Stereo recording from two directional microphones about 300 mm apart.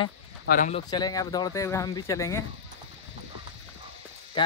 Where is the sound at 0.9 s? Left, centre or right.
Centre.